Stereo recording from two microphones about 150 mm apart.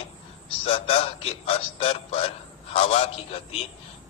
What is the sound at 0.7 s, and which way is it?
A man's voice, 45° left (ahead or behind).